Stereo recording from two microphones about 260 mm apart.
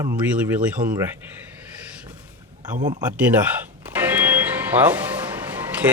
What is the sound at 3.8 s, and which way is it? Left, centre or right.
Music, centre.